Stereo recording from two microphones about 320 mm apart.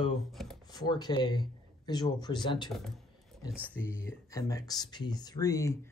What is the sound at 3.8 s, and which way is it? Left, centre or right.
Speech, centre.